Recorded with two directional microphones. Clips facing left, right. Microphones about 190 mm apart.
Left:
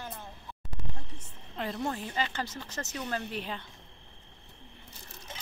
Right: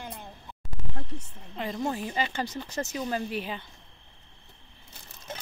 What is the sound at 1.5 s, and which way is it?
Speech, centre (ahead or behind).